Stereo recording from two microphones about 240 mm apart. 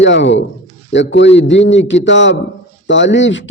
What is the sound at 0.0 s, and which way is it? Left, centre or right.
A man's voice, left.